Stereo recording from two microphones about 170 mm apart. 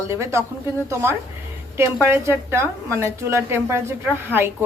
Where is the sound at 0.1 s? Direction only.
15° right (ahead or behind).